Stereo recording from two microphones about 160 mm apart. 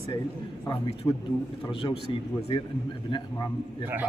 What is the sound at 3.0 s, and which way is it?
Speech, 30° left (ahead or behind).